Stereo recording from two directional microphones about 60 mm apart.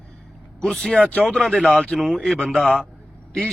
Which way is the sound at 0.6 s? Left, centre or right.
Centre.